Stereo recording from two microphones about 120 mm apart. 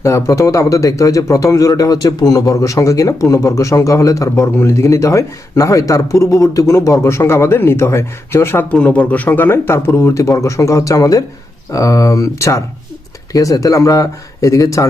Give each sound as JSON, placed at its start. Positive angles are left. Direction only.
{"t": 0.0, "sound": "a man's voice", "side_deg": 25}